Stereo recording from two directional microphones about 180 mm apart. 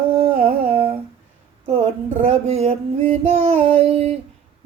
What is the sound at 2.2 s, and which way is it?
Female singing, 35° right (ahead or behind).